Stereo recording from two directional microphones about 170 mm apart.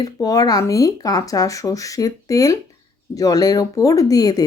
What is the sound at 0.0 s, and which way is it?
Speech, 20° left (ahead or behind).